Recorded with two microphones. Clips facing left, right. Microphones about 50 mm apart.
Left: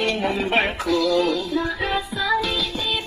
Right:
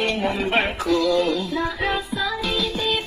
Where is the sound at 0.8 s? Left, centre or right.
Centre.